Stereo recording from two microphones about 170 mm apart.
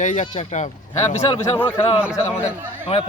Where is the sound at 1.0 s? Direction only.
25° left (ahead or behind).